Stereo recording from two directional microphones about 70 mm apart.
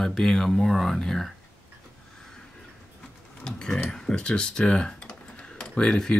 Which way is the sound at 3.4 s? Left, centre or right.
Centre.